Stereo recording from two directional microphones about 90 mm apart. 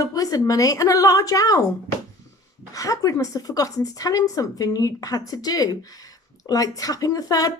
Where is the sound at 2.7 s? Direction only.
40° left (ahead or behind).